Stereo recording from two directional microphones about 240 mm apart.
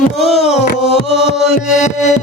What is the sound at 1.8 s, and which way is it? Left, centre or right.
Music, left.